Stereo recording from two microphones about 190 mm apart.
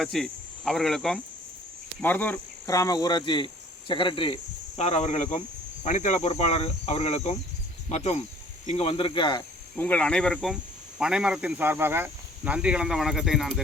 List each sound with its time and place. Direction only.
0.0 s speech: centre (ahead or behind)
2.0 s cricket: 10° left (ahead or behind); by 4.4 s 25° left (ahead or behind)
4.8 s speech: 35° left (ahead or behind)
9.7 s speech: 10° left (ahead or behind)